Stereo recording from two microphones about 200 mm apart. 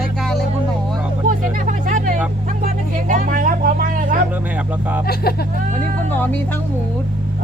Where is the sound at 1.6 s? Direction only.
40° right (ahead or behind).